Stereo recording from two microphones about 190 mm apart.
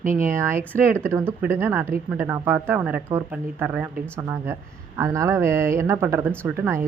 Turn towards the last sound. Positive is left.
turn(degrees=-10)  # may be behind; listen again after turning